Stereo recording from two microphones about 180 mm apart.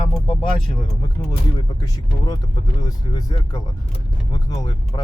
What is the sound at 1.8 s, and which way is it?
Speech, 25° left (ahead or behind).